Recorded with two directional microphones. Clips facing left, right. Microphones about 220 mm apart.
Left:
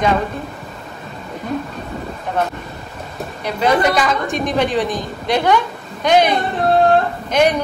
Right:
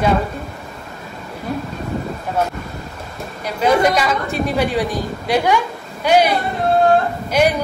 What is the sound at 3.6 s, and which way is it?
A woman's voice, 10° right (ahead or behind).